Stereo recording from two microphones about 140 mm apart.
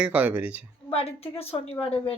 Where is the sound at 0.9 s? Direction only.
45° left (ahead or behind).